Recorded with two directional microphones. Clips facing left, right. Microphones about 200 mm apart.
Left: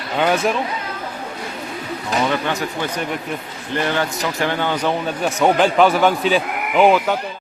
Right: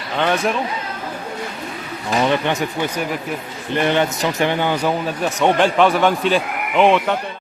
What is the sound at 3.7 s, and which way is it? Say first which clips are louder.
Speech: right 3 dB; 20° right (ahead or behind).